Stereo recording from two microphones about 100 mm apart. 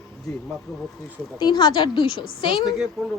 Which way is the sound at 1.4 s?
50° left (ahead or behind).